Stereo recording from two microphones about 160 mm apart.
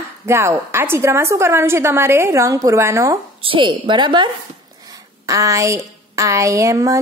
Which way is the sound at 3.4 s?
35° right (ahead or behind).